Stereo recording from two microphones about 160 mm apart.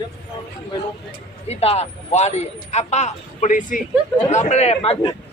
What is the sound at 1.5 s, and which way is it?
A man's voice, 40° left (ahead or behind).